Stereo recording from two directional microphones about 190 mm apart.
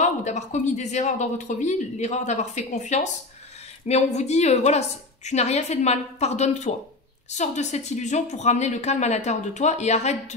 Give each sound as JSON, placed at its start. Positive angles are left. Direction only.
{"t": 0.0, "sound": "speech", "side_deg": 40}